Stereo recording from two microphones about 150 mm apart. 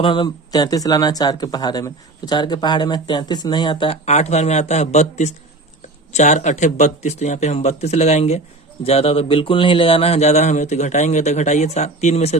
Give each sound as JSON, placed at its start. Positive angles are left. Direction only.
{"t": 0.0, "sound": "speech", "side_deg": 30}